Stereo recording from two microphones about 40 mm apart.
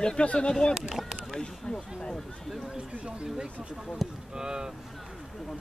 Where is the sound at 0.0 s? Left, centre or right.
Centre.